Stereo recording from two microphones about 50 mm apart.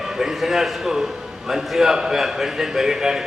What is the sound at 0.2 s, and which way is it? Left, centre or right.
A man's voice, centre.